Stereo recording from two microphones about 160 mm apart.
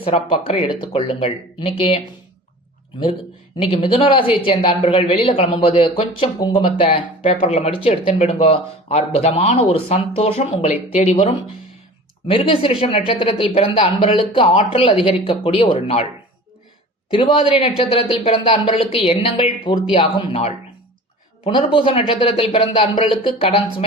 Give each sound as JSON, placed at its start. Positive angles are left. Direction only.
{"t": 0.0, "sound": "a woman's voice", "side_deg": 35}
{"t": 3.6, "sound": "a woman's voice", "side_deg": 35}
{"t": 12.3, "sound": "a woman's voice", "side_deg": 30}
{"t": 17.1, "sound": "a woman's voice", "side_deg": 35}